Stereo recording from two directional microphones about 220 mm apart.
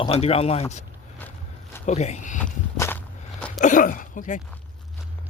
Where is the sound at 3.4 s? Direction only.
5° left (ahead or behind).